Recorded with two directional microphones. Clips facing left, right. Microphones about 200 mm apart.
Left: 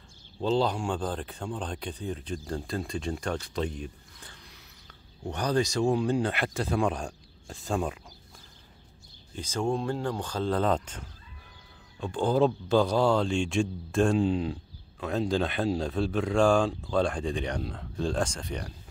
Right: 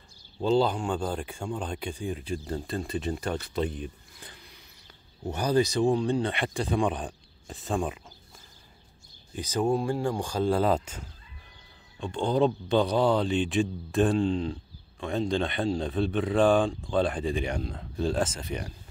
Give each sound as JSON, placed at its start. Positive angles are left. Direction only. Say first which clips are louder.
{"t": 0.4, "sound": "speech", "louder": "right 2 dB", "side_deg": -5}
{"t": 5.2, "sound": "speech", "louder": "right 2 dB", "side_deg": -5}
{"t": 9.3, "sound": "speech", "louder": "right 3 dB", "side_deg": -15}
{"t": 12.0, "sound": "speech", "louder": "even", "side_deg": 0}